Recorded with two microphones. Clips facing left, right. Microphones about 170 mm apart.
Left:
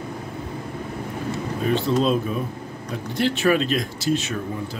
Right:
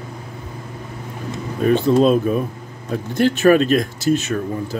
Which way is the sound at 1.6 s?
50° right (ahead or behind).